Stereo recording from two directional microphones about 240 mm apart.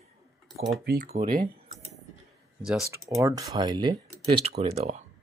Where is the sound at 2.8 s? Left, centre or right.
Centre.